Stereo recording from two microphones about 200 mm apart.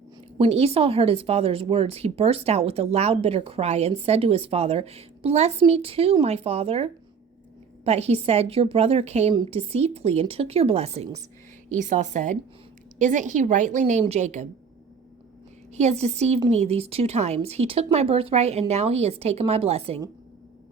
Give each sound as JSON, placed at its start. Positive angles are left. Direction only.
{"t": 0.3, "sound": "speech", "side_deg": -30}
{"t": 15.7, "sound": "speech", "side_deg": -35}